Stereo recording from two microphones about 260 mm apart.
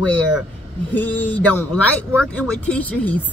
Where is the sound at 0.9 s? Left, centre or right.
Centre.